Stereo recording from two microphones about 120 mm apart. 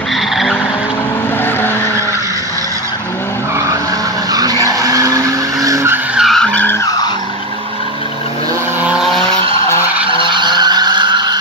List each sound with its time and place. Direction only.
4.3 s vehicle: 30° right (ahead or behind)
6.1 s vehicle: centre (ahead or behind)
8.8 s vehicle: 5° right (ahead or behind)
9.2 s vehicle: 25° left (ahead or behind)
10.3 s skidding: 40° right (ahead or behind)